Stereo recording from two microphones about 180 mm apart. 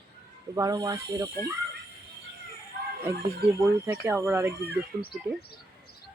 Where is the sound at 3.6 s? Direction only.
10° right (ahead or behind).